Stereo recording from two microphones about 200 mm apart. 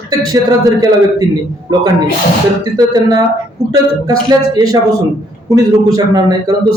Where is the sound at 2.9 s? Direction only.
20° right (ahead or behind).